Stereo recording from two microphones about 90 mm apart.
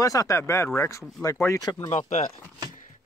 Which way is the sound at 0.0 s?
40° left (ahead or behind).